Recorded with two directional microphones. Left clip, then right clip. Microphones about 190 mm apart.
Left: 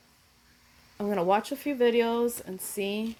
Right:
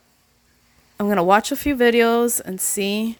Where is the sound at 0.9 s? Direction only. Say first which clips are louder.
Right 9 dB; 50° right (ahead or behind).